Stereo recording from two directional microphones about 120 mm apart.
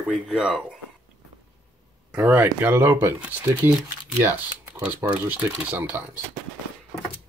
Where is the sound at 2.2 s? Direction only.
15° right (ahead or behind).